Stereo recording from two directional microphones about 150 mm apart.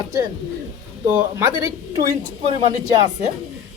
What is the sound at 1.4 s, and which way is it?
Speech, 20° right (ahead or behind).